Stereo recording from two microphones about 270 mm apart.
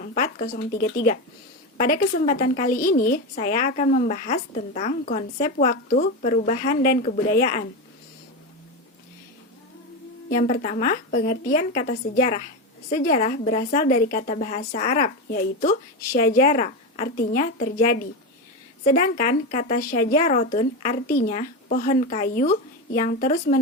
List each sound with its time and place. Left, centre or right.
0.0 s a woman's voice: left
10.2 s a woman's voice: left